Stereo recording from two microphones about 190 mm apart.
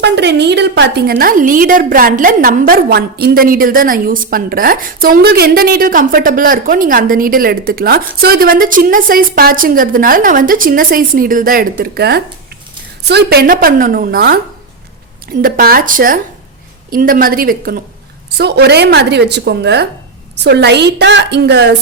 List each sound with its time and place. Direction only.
0.0 s a woman's voice: 65° right (ahead or behind)